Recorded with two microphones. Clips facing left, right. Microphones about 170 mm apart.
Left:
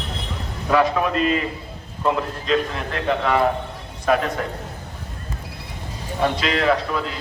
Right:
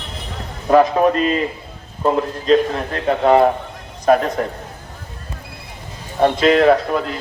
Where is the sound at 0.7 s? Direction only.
40° right (ahead or behind).